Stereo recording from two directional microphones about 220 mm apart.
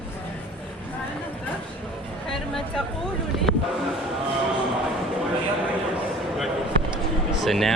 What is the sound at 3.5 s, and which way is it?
Music, 65° right (ahead or behind).